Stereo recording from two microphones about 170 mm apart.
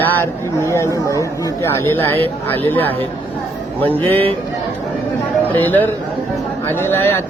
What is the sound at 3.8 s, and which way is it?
Speech, 10° left (ahead or behind).